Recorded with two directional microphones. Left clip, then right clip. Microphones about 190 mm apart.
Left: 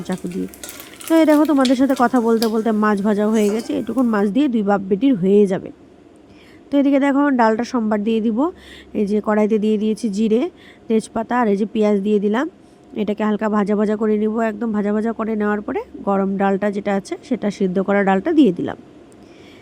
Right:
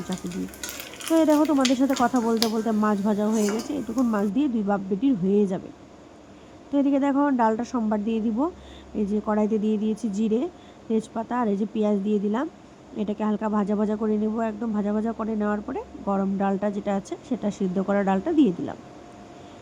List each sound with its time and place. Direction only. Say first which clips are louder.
1.1 s speech: left 6 dB; 30° left (ahead or behind)
6.7 s speech: left 7 dB; 30° left (ahead or behind)